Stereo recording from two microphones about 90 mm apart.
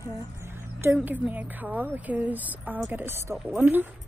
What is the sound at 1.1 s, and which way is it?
Speech, 20° right (ahead or behind).